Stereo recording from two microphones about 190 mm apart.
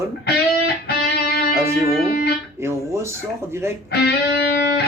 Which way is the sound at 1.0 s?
55° left (ahead or behind).